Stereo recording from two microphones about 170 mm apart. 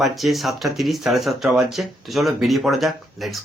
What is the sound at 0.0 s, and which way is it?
Speech, centre (ahead or behind).